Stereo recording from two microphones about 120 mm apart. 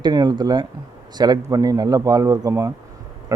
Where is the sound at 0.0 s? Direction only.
35° right (ahead or behind).